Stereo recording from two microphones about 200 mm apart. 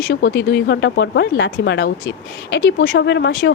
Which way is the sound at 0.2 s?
65° left (ahead or behind).